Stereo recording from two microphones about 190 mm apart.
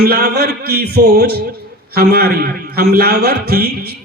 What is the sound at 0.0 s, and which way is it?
A man's voice, 55° right (ahead or behind).